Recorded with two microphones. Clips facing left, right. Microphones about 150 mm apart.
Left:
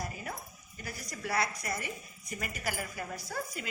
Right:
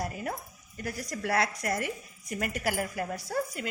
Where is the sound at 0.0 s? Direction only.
65° right (ahead or behind).